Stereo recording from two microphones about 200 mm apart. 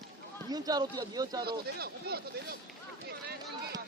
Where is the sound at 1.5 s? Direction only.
50° right (ahead or behind).